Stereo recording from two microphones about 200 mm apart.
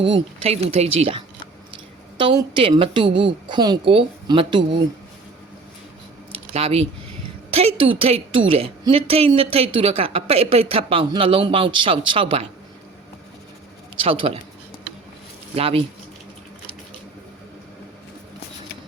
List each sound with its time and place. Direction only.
0.0 s a woman's voice: 30° right (ahead or behind)
6.5 s a woman's voice: 30° right (ahead or behind)
14.0 s a woman's voice: 25° right (ahead or behind)
15.5 s a woman's voice: 30° right (ahead or behind)